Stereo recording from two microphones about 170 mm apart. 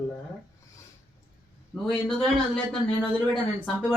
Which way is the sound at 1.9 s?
5° left (ahead or behind).